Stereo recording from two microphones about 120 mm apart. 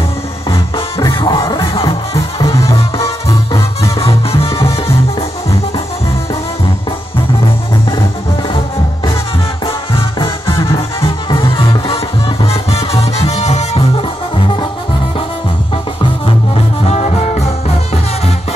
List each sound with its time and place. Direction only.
0.9 s music: 30° left (ahead or behind)
4.0 s music: 50° left (ahead or behind)
10.4 s music: 25° left (ahead or behind)
11.2 s music: 45° left (ahead or behind); by 13.8 s 65° left (ahead or behind)
16.8 s music: 65° left (ahead or behind)